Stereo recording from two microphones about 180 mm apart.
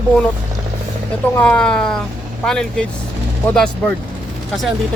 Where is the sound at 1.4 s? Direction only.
5° left (ahead or behind).